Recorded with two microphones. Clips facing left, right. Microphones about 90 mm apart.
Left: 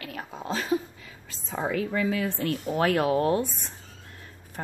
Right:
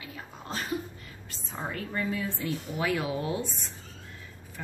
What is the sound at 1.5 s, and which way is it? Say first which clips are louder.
Speech: left 7 dB; 90° left.